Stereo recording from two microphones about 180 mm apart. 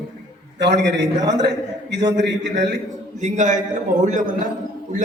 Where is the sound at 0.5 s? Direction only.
75° right (ahead or behind).